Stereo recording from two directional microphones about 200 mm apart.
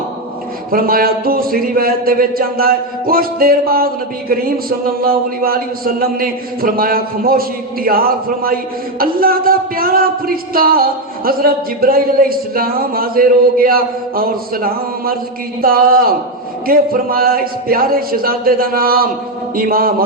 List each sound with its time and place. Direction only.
0.7 s speech: 45° right (ahead or behind)